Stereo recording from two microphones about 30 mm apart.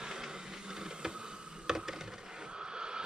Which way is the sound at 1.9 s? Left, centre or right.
Centre.